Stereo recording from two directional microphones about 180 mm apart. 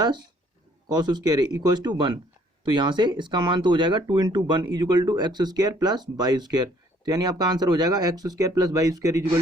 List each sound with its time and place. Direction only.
0.0 s speech: 25° right (ahead or behind)